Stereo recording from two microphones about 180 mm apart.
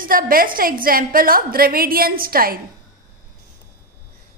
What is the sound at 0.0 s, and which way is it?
A woman's voice, 50° right (ahead or behind).